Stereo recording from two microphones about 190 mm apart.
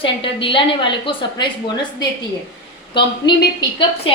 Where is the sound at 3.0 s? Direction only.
25° left (ahead or behind).